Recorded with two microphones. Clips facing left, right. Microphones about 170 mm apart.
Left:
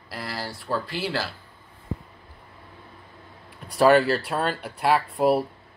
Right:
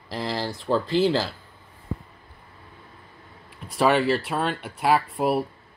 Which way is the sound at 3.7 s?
Centre (ahead or behind).